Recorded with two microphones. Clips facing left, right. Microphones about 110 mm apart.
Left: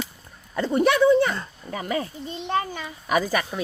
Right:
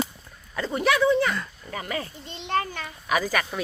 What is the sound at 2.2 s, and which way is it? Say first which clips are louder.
A man's voice: right 2 dB; 10° left (ahead or behind).